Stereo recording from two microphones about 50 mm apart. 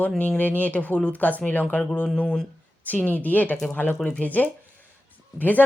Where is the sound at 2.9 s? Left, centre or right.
Left.